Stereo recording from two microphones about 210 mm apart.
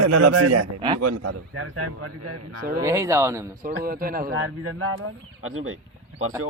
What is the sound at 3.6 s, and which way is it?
Speech, 40° right (ahead or behind).